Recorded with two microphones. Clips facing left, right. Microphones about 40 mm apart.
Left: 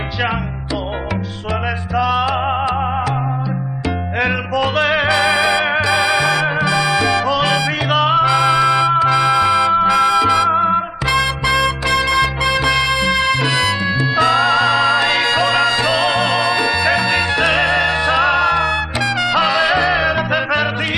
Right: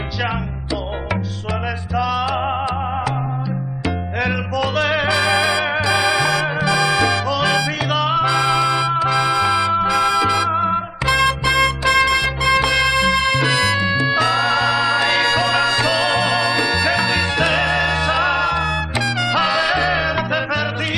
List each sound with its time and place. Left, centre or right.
2.0 s music: centre
4.2 s music: centre
13.4 s music: centre
14.1 s music: centre